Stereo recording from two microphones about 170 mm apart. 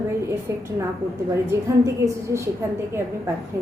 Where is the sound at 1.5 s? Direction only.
15° right (ahead or behind).